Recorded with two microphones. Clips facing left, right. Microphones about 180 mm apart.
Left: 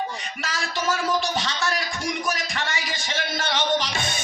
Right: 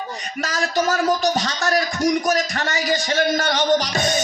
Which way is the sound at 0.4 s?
40° right (ahead or behind).